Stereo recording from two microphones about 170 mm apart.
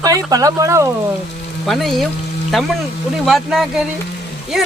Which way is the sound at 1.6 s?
Centre (ahead or behind).